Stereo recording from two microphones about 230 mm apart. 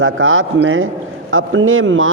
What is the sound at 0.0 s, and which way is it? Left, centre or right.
A man's voice, right.